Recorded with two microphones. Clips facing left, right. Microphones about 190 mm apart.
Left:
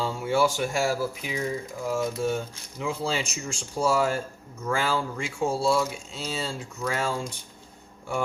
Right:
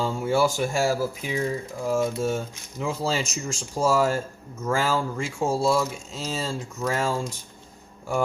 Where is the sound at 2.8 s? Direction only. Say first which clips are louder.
Right 2 dB; 40° right (ahead or behind).